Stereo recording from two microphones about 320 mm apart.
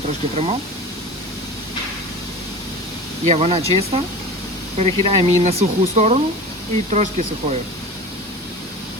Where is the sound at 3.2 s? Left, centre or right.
Centre.